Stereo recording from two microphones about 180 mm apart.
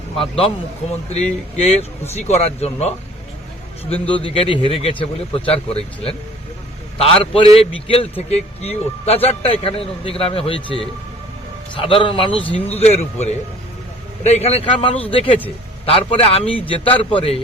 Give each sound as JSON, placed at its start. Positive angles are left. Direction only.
{"t": 0.2, "sound": "a man's voice", "side_deg": 30}
{"t": 4.1, "sound": "a man's voice", "side_deg": 30}
{"t": 11.7, "sound": "a man's voice", "side_deg": 30}